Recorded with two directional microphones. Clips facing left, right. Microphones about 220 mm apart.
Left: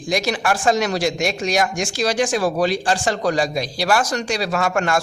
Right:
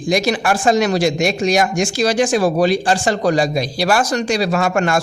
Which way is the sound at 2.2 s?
30° right (ahead or behind).